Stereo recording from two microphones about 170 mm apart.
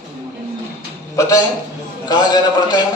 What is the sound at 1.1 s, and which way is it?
A man's voice, 20° left (ahead or behind).